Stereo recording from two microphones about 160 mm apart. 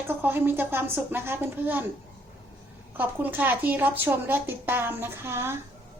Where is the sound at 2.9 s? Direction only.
10° right (ahead or behind).